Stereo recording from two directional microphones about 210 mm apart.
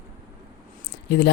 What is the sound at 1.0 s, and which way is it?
Speech, 50° left (ahead or behind).